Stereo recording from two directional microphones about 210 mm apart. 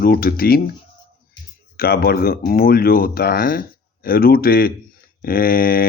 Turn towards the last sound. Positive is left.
turn(degrees=45)  # may be behind; listen again after turning